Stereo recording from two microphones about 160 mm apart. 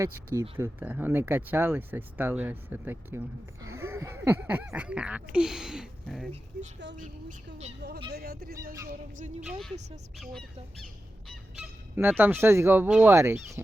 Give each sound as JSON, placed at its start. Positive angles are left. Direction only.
{"t": 0.0, "sound": "speech", "side_deg": -15}
{"t": 6.9, "sound": "speech", "side_deg": -50}
{"t": 7.8, "sound": "speech", "side_deg": -90}
{"t": 8.1, "sound": "speech", "side_deg": -75}
{"t": 8.9, "sound": "a sound", "side_deg": -55}
{"t": 9.5, "sound": "speech", "side_deg": 0}
{"t": 11.3, "sound": "fowl", "side_deg": 0}
{"t": 11.9, "sound": "speech", "side_deg": -10}